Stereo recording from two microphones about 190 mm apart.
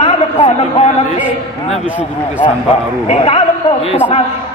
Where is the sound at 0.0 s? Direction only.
30° left (ahead or behind).